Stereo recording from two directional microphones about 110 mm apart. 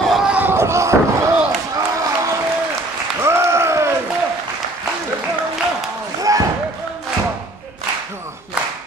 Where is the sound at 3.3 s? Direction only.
25° right (ahead or behind).